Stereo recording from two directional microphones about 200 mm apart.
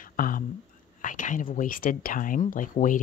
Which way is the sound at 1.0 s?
40° left (ahead or behind).